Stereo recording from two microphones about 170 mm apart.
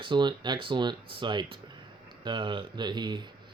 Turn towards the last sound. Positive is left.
turn(degrees=-25)  # may be behind; listen again after turning